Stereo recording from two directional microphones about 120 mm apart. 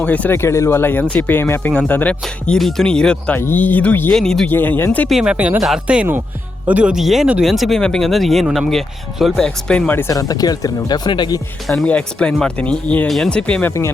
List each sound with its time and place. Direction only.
0.0 s speech: 15° left (ahead or behind)
2.2 s speech: centre (ahead or behind)
4.1 s speech: 5° left (ahead or behind)
4.4 s speech: 15° left (ahead or behind)
5.0 s speech: 5° right (ahead or behind); by 10.2 s 20° left (ahead or behind)
10.2 s speech: 30° left (ahead or behind)
11.7 s speech: 5° left (ahead or behind)